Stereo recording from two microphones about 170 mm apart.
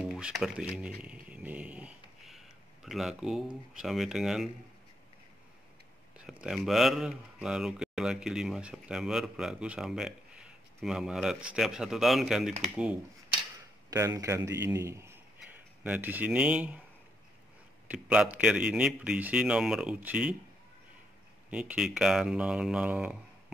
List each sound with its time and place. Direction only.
0.0 s a sound: 5° right (ahead or behind)
3.7 s speech: centre (ahead or behind)
6.4 s speech: centre (ahead or behind)
13.8 s speech: 20° right (ahead or behind)
17.8 s speech: 5° right (ahead or behind)
21.5 s speech: 5° right (ahead or behind)